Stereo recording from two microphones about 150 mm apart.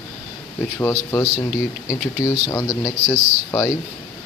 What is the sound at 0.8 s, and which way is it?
Speech, 15° left (ahead or behind).